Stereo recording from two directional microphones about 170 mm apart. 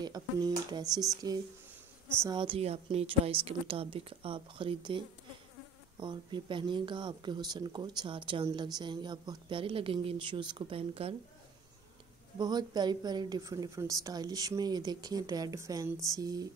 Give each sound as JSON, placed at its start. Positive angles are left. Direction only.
{"t": 0.0, "sound": "a woman's voice", "side_deg": -25}
{"t": 12.4, "sound": "a woman's voice", "side_deg": -25}